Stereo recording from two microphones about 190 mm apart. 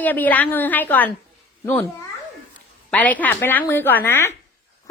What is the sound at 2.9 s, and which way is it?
A woman's voice, 10° left (ahead or behind).